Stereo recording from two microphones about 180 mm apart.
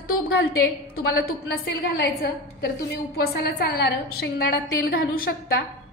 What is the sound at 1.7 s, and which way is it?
A woman's voice, 65° left (ahead or behind).